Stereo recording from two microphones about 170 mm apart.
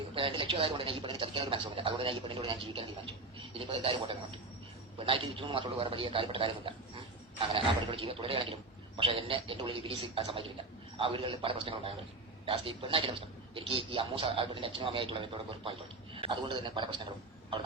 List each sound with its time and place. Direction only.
0.1 s a man's voice: 30° right (ahead or behind)